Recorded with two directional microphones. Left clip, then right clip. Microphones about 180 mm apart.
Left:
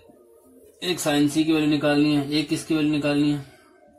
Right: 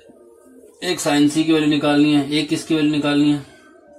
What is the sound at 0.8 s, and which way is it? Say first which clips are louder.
A man's voice: right 5 dB; 15° left (ahead or behind).